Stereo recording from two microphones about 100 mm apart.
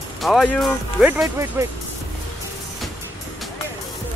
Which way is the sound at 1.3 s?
30° right (ahead or behind).